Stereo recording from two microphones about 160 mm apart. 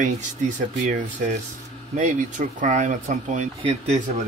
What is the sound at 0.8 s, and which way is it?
Speech, 50° right (ahead or behind).